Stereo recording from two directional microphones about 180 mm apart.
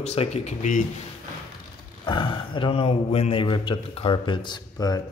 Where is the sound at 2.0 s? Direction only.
25° left (ahead or behind).